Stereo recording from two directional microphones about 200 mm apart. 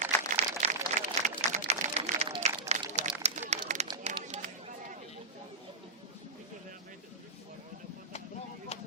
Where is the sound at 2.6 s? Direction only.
35° right (ahead or behind).